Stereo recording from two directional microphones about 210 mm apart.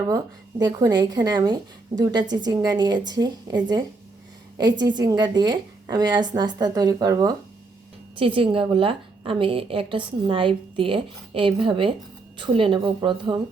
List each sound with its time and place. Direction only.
0.6 s a woman's voice: 20° right (ahead or behind)